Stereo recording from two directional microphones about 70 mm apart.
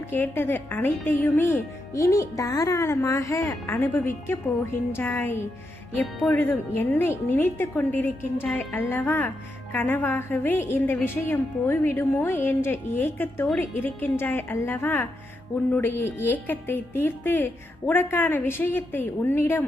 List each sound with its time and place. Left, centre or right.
0.1 s a woman's voice: left
1.9 s speech: left
3.8 s a woman's voice: left